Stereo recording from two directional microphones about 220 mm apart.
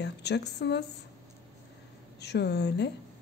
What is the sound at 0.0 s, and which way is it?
Speech, 50° left (ahead or behind).